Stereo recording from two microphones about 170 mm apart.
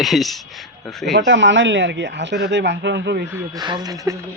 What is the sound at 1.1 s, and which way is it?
Speech, 90° right.